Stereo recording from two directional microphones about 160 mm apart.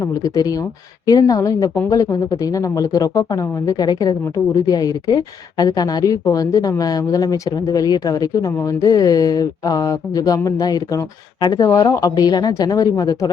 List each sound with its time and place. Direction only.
0.0 s speech: 20° left (ahead or behind)